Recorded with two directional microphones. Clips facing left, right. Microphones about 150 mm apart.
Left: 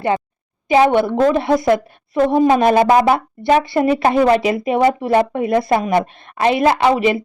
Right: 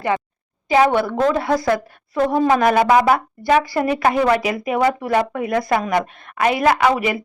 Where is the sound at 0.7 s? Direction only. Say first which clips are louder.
Left 3 dB; 20° left (ahead or behind).